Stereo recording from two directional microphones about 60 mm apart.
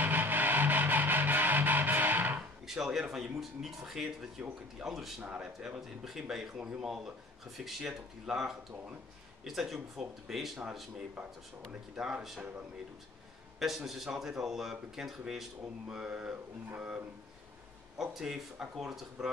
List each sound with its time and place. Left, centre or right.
0.0 s music: right
2.6 s speech: centre
13.6 s speech: centre
17.9 s speech: centre